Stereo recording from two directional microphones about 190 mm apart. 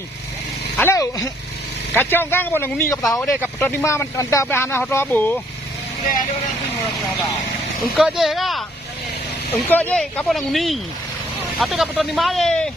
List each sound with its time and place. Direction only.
0.8 s speech: 15° left (ahead or behind)
7.9 s speech: centre (ahead or behind)
9.6 s speech: 10° left (ahead or behind)